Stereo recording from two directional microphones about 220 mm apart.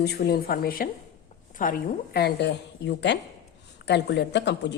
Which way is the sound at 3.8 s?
50° left (ahead or behind).